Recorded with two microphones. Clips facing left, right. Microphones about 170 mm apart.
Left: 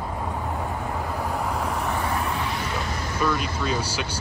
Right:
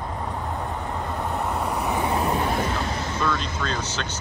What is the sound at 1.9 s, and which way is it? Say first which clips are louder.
Vehicle: right 3 dB; 20° right (ahead or behind).